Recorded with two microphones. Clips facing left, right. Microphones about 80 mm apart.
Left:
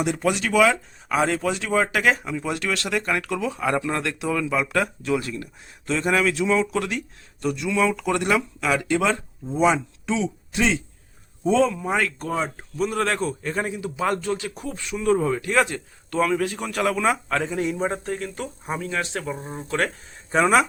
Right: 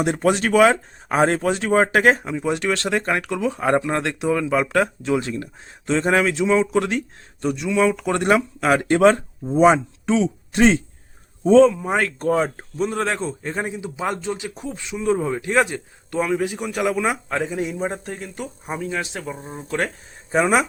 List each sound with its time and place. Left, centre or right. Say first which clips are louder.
0.0 s speech: right 4 dB; right
2.3 s speech: right 4 dB; right
4.8 s a man's voice: right 3 dB; right
7.4 s a man's voice: right 3 dB; right
8.6 s speech: right 8 dB; right
11.7 s a man's voice: right 1 dB; right
11.9 s speech: right 5 dB; right
12.8 s a man's voice: right 1 dB; right